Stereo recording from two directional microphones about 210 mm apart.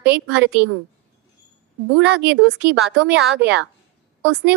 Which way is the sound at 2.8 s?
55° right (ahead or behind).